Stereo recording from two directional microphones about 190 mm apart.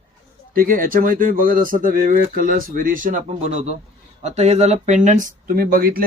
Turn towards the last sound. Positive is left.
turn(degrees=-50)  # may be behind; listen again after turning